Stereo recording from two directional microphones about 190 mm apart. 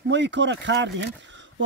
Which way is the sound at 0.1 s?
70° right (ahead or behind).